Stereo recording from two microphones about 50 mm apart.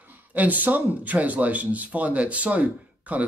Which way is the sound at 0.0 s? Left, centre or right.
Right.